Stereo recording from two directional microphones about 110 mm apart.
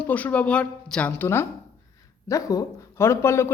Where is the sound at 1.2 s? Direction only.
20° left (ahead or behind).